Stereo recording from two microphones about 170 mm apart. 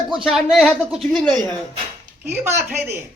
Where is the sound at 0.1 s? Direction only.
Centre (ahead or behind).